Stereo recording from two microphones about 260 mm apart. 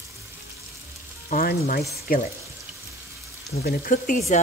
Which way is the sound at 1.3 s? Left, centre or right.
Left.